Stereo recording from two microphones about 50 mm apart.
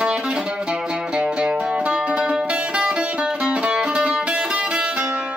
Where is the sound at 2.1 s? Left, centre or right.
Centre.